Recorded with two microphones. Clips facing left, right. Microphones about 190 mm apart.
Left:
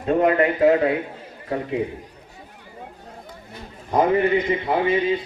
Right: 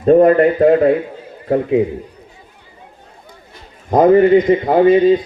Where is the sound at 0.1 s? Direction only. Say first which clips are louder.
Right 9 dB; 45° right (ahead or behind).